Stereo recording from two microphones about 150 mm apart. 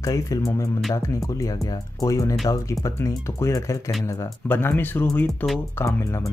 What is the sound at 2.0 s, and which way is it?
Speech, 20° left (ahead or behind).